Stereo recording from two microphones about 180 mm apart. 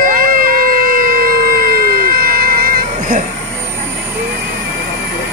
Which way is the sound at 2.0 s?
55° right (ahead or behind).